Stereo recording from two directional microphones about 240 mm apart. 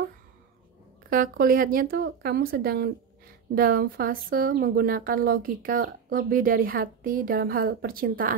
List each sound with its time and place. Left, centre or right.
1.1 s speech: right